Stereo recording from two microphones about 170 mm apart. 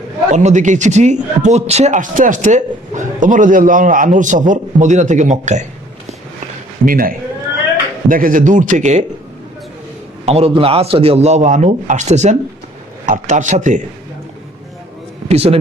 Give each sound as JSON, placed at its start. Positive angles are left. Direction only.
{"t": 0.3, "sound": "a man's voice", "side_deg": -45}
{"t": 6.8, "sound": "speech", "side_deg": -55}
{"t": 8.1, "sound": "a man's voice", "side_deg": -55}
{"t": 10.2, "sound": "a man's voice", "side_deg": -35}
{"t": 15.3, "sound": "a man's voice", "side_deg": -35}